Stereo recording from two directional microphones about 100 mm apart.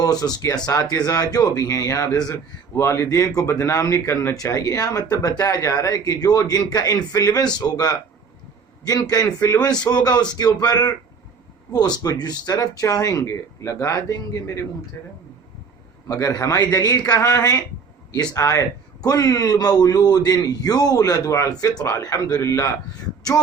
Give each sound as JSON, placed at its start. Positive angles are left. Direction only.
{"t": 0.0, "sound": "a man's voice", "side_deg": 40}